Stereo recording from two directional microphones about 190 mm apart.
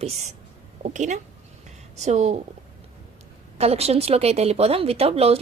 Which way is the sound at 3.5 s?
35° right (ahead or behind).